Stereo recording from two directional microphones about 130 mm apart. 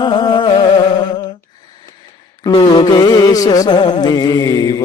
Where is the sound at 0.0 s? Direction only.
35° left (ahead or behind).